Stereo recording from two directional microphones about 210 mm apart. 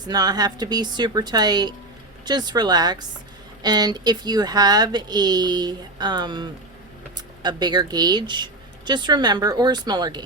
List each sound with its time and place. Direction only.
0.0 s speech: 20° right (ahead or behind)